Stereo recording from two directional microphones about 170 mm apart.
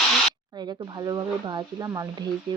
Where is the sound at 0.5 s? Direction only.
25° right (ahead or behind).